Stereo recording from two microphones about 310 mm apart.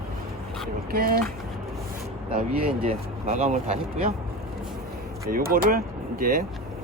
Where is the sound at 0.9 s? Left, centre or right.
Right.